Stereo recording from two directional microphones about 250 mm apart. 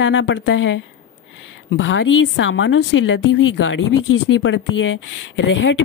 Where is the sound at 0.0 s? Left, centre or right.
Left.